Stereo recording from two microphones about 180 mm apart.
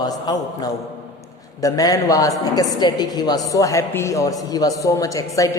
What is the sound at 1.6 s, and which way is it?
A woman's voice, 20° left (ahead or behind).